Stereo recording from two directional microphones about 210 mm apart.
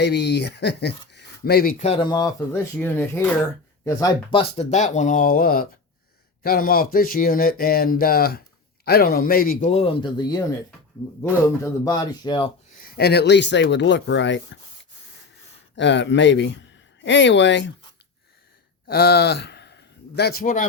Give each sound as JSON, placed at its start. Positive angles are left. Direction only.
{"t": 0.0, "sound": "speech", "side_deg": 55}
{"t": 1.8, "sound": "speech", "side_deg": 25}
{"t": 12.7, "sound": "speech", "side_deg": 45}
{"t": 15.7, "sound": "speech", "side_deg": 60}
{"t": 18.9, "sound": "speech", "side_deg": 50}